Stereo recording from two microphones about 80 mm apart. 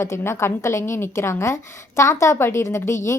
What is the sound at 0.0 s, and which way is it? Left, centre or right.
A woman's voice, left.